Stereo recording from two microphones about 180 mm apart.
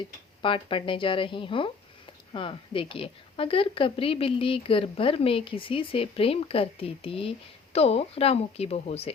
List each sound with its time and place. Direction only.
0.4 s a woman's voice: 30° left (ahead or behind)